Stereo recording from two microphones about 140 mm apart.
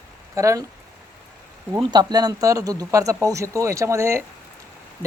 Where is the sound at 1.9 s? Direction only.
30° right (ahead or behind).